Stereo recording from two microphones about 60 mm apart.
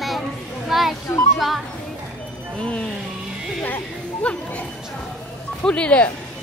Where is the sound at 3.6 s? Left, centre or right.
Left.